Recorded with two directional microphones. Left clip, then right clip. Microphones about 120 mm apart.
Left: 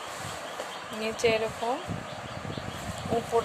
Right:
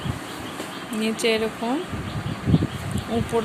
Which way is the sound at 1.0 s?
15° left (ahead or behind).